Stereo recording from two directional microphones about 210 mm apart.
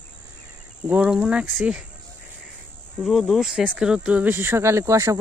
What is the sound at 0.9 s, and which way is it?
Speech, 5° right (ahead or behind).